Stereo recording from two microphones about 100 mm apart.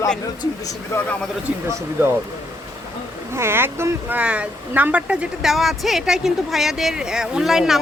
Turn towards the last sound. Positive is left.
turn(degrees=-5)  # may be behind; listen again after turning